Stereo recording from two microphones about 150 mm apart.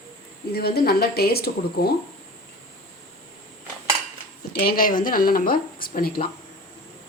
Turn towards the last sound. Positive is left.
turn(degrees=75)  # may be behind; listen again after turning